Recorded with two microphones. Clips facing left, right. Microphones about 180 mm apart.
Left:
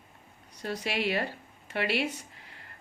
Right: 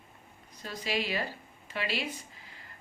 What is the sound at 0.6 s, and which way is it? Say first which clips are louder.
A woman's voice: left 3 dB; 65° left (ahead or behind).